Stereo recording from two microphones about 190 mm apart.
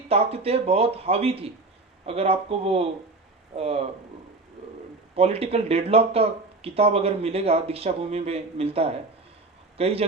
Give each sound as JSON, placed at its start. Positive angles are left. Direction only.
{"t": 0.1, "sound": "speech", "side_deg": -30}
{"t": 5.1, "sound": "speech", "side_deg": -30}